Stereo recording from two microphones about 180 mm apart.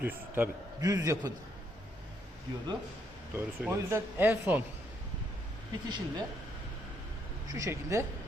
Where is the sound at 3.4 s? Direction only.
15° right (ahead or behind).